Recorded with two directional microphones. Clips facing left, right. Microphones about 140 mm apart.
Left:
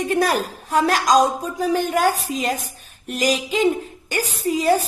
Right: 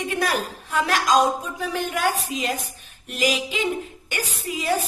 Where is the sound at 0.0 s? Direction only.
40° left (ahead or behind).